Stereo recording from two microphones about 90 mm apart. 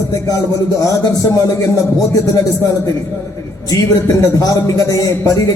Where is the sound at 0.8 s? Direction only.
40° left (ahead or behind).